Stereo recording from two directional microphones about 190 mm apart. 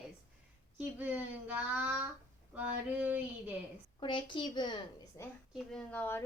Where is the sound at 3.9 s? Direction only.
25° left (ahead or behind).